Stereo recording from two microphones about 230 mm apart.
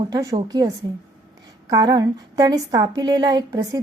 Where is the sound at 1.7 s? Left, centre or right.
Centre.